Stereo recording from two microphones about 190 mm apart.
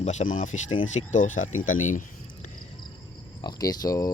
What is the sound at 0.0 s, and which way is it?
Speech, 35° left (ahead or behind).